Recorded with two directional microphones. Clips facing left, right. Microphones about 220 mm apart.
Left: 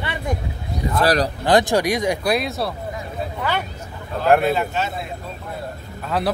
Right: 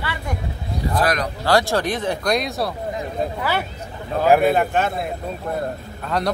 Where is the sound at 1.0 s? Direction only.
35° left (ahead or behind).